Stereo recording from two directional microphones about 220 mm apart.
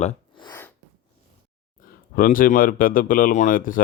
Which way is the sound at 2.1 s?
40° left (ahead or behind).